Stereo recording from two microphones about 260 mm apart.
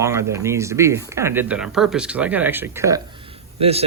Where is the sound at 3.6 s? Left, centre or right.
Right.